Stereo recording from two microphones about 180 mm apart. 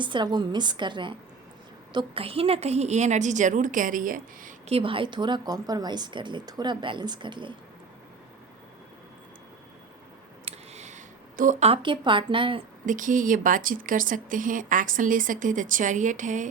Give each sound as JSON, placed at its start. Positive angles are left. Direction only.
{"t": 0.0, "sound": "a woman's voice", "side_deg": -25}
{"t": 4.7, "sound": "speech", "side_deg": -30}
{"t": 10.5, "sound": "a sound", "side_deg": -40}
{"t": 11.7, "sound": "speech", "side_deg": -25}
{"t": 12.8, "sound": "speech", "side_deg": -45}